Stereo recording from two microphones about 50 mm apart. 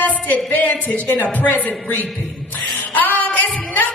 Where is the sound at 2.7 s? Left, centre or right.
Left.